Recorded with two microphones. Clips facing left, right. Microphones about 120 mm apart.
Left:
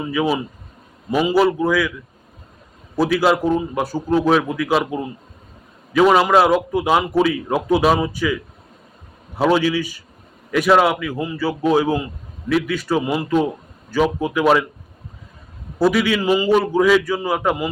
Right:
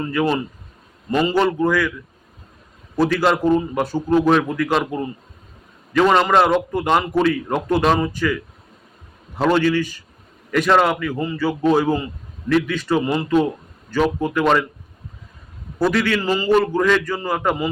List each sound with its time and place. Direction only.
0.0 s a man's voice: 5° left (ahead or behind)
2.9 s a man's voice: 5° left (ahead or behind)
15.8 s a man's voice: 10° left (ahead or behind)